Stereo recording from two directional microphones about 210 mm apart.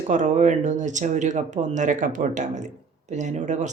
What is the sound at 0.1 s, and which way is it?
Speech, 35° right (ahead or behind).